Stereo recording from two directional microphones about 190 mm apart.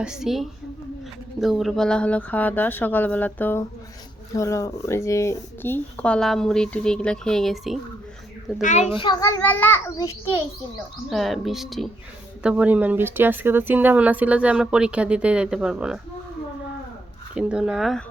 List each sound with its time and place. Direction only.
0.0 s speech: 5° right (ahead or behind)
8.6 s a child's voice: 40° left (ahead or behind)
9.2 s speech: 10° left (ahead or behind)
11.1 s speech: centre (ahead or behind)
17.3 s speech: 5° right (ahead or behind)